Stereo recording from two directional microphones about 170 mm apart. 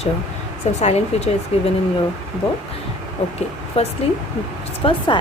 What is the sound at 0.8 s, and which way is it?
Speech, 40° left (ahead or behind).